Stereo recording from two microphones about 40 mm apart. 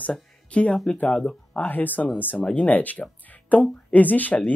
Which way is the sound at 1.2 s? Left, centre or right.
Left.